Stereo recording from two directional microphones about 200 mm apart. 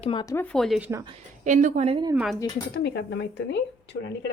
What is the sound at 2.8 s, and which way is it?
Speech, 60° left (ahead or behind).